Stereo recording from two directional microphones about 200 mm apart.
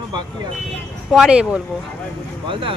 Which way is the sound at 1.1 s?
5° right (ahead or behind).